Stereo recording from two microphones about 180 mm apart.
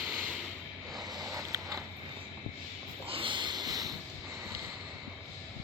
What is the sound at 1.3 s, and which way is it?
Mechanisms, 15° right (ahead or behind).